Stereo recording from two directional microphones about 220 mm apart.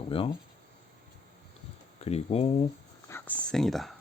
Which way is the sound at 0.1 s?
25° left (ahead or behind).